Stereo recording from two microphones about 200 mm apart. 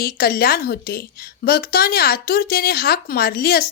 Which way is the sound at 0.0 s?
50° left (ahead or behind).